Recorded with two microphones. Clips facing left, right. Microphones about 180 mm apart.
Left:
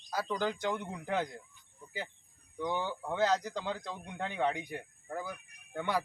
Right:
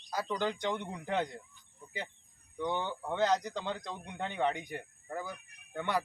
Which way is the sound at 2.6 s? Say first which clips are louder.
Even; 10° left (ahead or behind).